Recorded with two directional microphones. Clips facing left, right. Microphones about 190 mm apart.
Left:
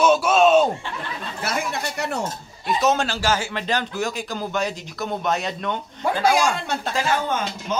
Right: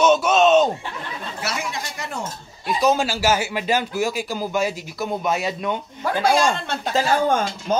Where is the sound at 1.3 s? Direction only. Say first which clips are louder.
Left 3 dB; 55° left (ahead or behind).